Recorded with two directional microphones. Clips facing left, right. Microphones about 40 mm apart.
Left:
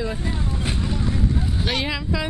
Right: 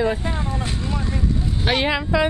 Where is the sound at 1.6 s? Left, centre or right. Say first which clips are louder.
Right 7 dB; right.